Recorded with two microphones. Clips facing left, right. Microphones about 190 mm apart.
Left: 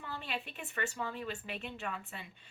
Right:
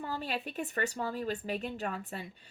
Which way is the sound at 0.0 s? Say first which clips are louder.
Right 5 dB; 40° right (ahead or behind).